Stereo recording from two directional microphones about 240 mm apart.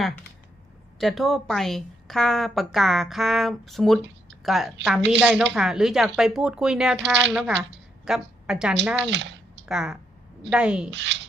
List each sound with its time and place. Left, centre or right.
0.9 s a woman's voice: centre
9.0 s speech: right
9.6 s a woman's voice: centre
10.9 s speech: right